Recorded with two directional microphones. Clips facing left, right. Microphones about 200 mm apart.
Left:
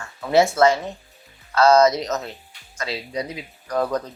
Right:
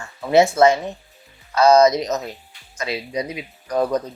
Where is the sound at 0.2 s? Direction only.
20° right (ahead or behind).